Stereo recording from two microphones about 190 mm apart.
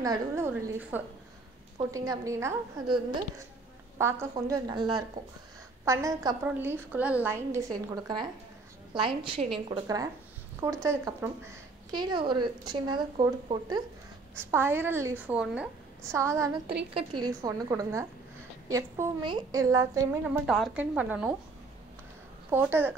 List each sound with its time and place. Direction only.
0.0 s a woman's voice: 15° right (ahead or behind)
20.4 s speech: centre (ahead or behind)
22.5 s a woman's voice: 10° right (ahead or behind)